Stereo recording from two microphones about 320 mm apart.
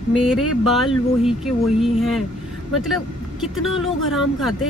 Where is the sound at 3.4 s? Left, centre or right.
Centre.